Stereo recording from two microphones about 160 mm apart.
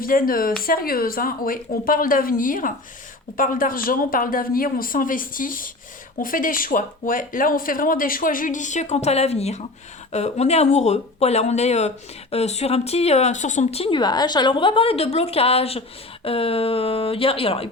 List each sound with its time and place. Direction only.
0.0 s speech: 65° left (ahead or behind); by 17.7 s 35° left (ahead or behind)